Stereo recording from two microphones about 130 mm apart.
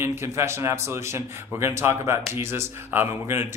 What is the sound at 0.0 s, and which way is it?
Speech, 20° right (ahead or behind).